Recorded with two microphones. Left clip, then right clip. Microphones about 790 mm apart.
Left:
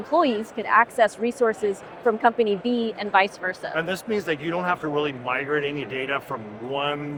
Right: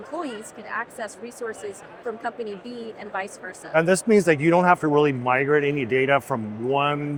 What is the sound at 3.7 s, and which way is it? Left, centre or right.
Speech, right.